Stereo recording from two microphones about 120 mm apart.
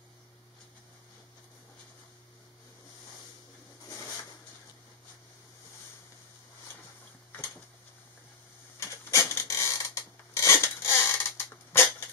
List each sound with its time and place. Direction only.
8.7 s rub: 25° left (ahead or behind)